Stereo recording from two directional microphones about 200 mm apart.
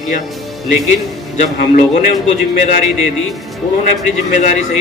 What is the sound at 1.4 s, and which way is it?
Speech, 40° left (ahead or behind).